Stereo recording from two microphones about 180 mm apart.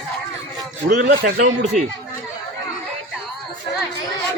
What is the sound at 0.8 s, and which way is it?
Speech, 55° right (ahead or behind).